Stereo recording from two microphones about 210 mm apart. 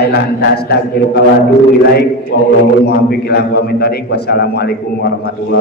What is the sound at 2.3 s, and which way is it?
A man's voice, 50° left (ahead or behind).